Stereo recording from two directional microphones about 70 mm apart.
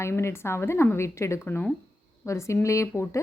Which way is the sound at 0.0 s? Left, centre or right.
Left.